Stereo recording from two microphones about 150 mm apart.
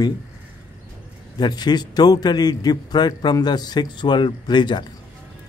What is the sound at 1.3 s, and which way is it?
A man's voice, 30° left (ahead or behind).